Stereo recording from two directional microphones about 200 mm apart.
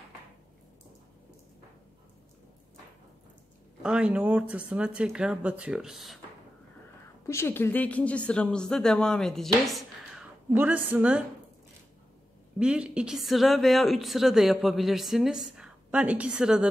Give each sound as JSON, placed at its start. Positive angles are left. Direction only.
{"t": 3.8, "sound": "speech", "side_deg": -5}
{"t": 7.2, "sound": "a woman's voice", "side_deg": 10}
{"t": 12.5, "sound": "speech", "side_deg": -5}